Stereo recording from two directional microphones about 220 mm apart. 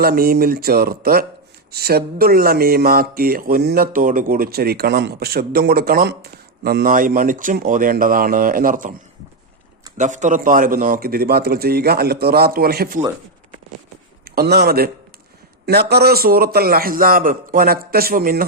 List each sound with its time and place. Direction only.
0.0 s a man's voice: 45° right (ahead or behind)
10.0 s a man's voice: 35° right (ahead or behind)
14.3 s a man's voice: 45° right (ahead or behind)